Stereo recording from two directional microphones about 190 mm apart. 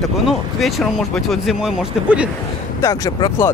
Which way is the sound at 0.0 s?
Centre (ahead or behind).